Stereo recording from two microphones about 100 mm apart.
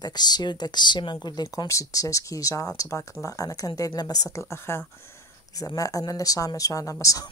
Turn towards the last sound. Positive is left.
turn(degrees=35)  # may be behind; listen again after turning